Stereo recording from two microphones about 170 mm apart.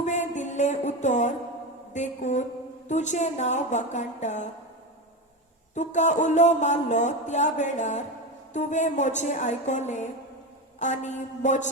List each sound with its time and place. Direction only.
0.0 s a sound: 45° left (ahead or behind)
1.9 s speech: 45° left (ahead or behind)
5.7 s speech: 45° left (ahead or behind)